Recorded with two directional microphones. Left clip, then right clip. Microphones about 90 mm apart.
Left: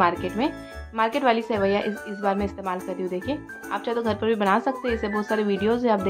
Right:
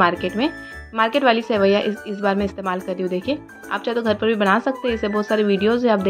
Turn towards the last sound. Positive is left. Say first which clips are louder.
# right 4 dB
turn(degrees=-25)  # may be behind; listen again after turning